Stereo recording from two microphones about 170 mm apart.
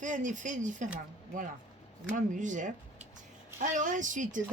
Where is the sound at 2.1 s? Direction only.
50° right (ahead or behind).